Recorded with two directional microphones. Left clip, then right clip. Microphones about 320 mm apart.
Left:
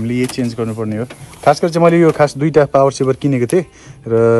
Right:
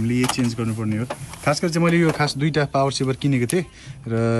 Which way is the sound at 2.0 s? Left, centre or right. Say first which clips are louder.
Left 9 dB; left.